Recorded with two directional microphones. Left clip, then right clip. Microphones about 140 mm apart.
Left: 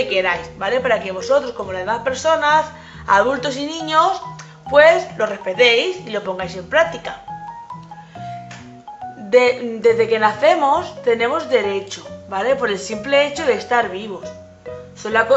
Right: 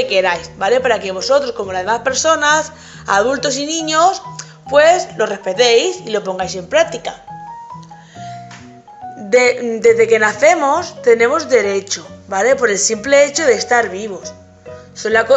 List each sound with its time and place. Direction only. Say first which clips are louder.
0.1 s a man's voice: right 4 dB; 45° right (ahead or behind)
9.3 s speech: right 2 dB; 30° right (ahead or behind)